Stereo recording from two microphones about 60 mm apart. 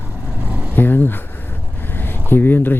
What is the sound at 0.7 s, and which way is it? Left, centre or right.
Speech, left.